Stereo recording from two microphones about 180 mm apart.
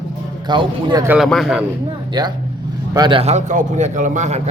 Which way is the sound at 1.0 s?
10° right (ahead or behind).